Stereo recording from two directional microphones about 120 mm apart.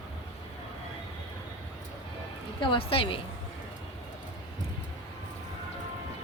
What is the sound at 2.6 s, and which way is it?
Speech, 45° left (ahead or behind).